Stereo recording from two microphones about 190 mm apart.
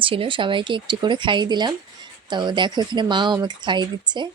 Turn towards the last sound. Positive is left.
turn(degrees=-25)  # may be behind; listen again after turning